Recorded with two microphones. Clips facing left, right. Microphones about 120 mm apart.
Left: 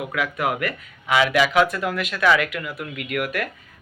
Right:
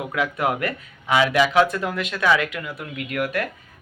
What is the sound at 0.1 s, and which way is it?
Speech, 30° right (ahead or behind).